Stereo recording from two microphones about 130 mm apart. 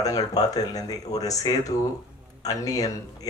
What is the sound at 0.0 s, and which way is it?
Speech, 30° left (ahead or behind).